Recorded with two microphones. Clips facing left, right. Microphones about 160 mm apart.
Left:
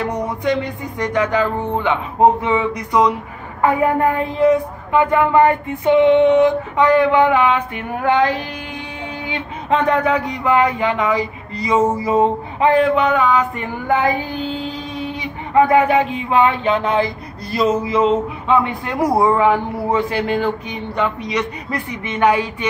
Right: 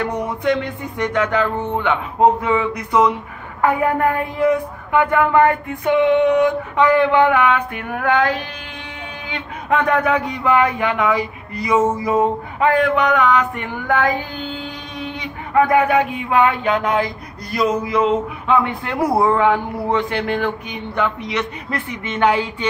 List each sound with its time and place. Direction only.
0.1 s a woman's voice: 20° left (ahead or behind)
11.8 s a sound: centre (ahead or behind)
12.1 s a woman's voice: 20° left (ahead or behind)
15.5 s a woman's voice: 25° left (ahead or behind); by 20.3 s 5° left (ahead or behind)
20.3 s speech: 20° left (ahead or behind)